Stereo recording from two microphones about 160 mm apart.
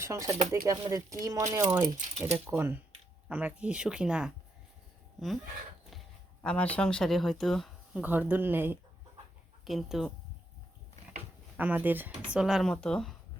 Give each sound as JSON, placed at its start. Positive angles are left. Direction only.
{"t": 0.0, "sound": "speech", "side_deg": -20}
{"t": 6.4, "sound": "speech", "side_deg": 5}
{"t": 8.0, "sound": "speech", "side_deg": -10}
{"t": 9.6, "sound": "speech", "side_deg": 0}
{"t": 11.5, "sound": "speech", "side_deg": -10}